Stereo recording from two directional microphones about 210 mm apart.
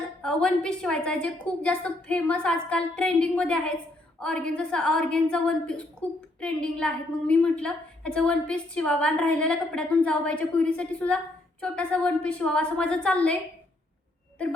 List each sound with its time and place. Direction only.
0.2 s a woman's voice: 5° left (ahead or behind)